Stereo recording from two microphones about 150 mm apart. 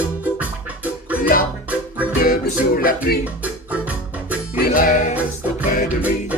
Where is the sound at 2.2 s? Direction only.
75° left (ahead or behind).